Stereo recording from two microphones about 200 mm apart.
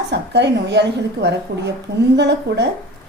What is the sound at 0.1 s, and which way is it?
A woman's voice, 60° right (ahead or behind).